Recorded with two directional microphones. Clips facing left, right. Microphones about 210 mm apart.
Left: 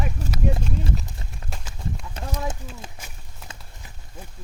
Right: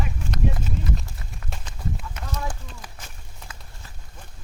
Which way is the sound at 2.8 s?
25° left (ahead or behind).